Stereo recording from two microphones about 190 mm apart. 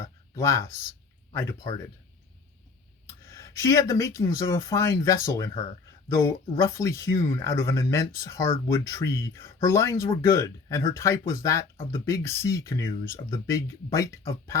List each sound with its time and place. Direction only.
0.3 s speech: 15° left (ahead or behind)
3.2 s speech: 15° left (ahead or behind)